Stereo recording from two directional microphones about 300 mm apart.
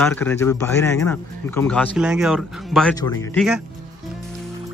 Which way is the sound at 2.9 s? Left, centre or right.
Centre.